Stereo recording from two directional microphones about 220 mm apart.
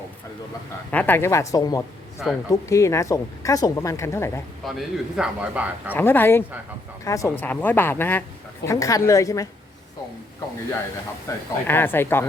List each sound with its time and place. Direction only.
0.9 s speech: 10° left (ahead or behind)
4.6 s a man's voice: centre (ahead or behind)
5.9 s speech: 10° left (ahead or behind)
11.3 s speech: 15° left (ahead or behind)